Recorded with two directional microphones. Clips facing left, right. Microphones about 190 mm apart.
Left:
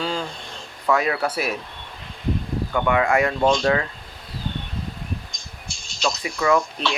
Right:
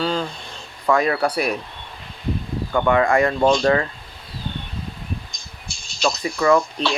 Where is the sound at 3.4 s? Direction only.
10° right (ahead or behind).